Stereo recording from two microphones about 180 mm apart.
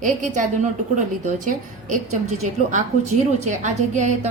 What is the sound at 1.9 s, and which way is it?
A woman's voice, 45° right (ahead or behind).